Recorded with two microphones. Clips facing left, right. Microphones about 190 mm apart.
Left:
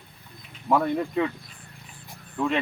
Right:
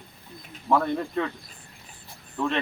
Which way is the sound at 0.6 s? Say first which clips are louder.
Left 1 dB; 10° left (ahead or behind).